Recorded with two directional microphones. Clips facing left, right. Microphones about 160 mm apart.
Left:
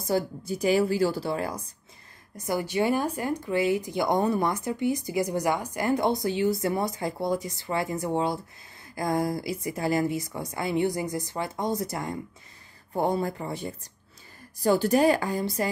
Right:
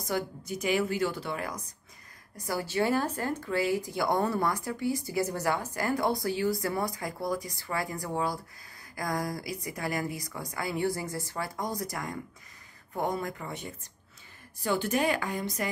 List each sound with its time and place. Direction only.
0.0 s speech: 30° left (ahead or behind)